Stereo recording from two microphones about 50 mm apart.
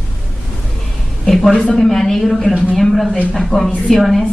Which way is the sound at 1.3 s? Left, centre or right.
Centre.